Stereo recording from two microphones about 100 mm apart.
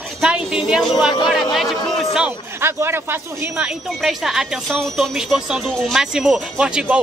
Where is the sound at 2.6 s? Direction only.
25° right (ahead or behind).